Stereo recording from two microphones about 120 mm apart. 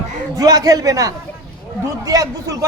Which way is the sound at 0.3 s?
30° right (ahead or behind).